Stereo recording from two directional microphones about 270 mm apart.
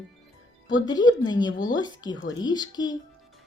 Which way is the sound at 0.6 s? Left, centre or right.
Centre.